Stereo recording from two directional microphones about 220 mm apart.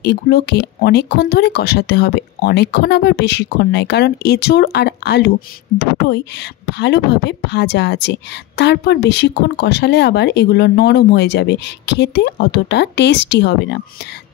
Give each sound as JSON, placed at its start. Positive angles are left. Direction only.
{"t": 0.0, "sound": "speech", "side_deg": 45}